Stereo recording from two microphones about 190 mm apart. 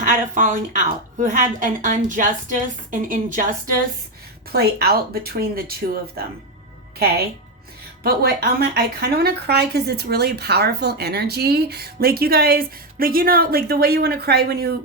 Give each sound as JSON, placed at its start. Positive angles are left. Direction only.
{"t": 0.0, "sound": "a woman's voice", "side_deg": -45}
{"t": 4.5, "sound": "a woman's voice", "side_deg": -55}
{"t": 7.0, "sound": "a woman's voice", "side_deg": -55}